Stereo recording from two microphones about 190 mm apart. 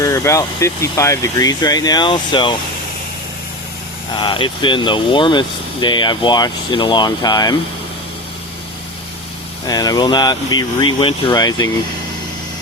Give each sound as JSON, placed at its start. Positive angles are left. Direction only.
{"t": 0.0, "sound": "speech", "side_deg": 15}
{"t": 4.2, "sound": "speech", "side_deg": 25}
{"t": 9.6, "sound": "speech", "side_deg": 20}